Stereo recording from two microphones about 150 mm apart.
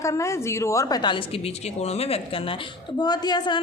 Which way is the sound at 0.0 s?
20° left (ahead or behind).